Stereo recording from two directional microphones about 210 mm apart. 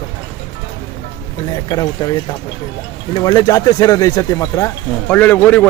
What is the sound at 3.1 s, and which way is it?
A man's voice, 20° left (ahead or behind).